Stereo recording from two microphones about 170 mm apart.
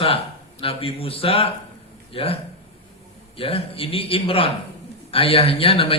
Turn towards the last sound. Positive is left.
turn(degrees=35)  # may be behind; listen again after turning